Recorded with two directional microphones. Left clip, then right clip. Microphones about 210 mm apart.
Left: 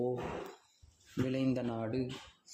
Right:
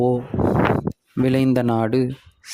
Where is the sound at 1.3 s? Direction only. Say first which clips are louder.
Right 16 dB; 50° right (ahead or behind).